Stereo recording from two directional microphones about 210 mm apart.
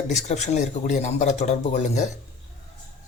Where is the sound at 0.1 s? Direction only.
35° left (ahead or behind).